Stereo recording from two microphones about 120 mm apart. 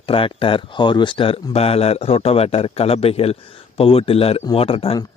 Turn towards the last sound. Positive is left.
turn(degrees=50)  # may be behind; listen again after turning